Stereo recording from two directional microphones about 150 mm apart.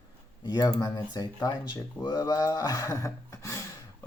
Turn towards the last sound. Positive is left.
turn(degrees=20)  # may be behind; listen again after turning